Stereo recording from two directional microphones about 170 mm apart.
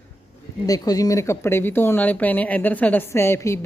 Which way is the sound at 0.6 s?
20° left (ahead or behind).